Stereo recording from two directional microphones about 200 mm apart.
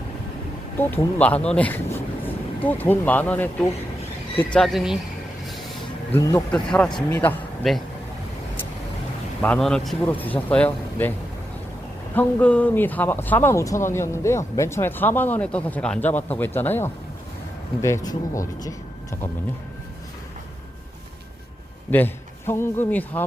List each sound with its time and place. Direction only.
1.2 s speech: 5° left (ahead or behind)
6.1 s speech: 15° left (ahead or behind)
6.7 s a man's voice: 5° left (ahead or behind)
9.4 s speech: 5° left (ahead or behind)
12.1 s speech: 5° left (ahead or behind)
21.8 s a man's voice: 10° left (ahead or behind)